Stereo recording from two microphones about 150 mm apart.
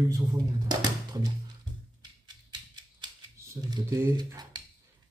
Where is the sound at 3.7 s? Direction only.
25° right (ahead or behind).